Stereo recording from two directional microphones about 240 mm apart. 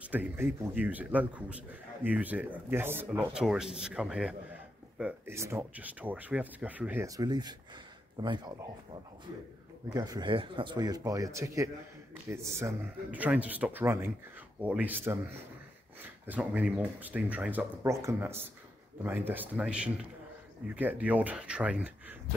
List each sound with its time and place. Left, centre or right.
0.1 s speech: centre